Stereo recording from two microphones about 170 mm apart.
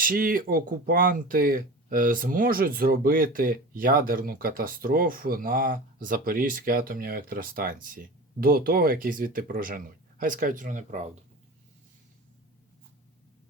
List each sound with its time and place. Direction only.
0.0 s speech: 55° right (ahead or behind)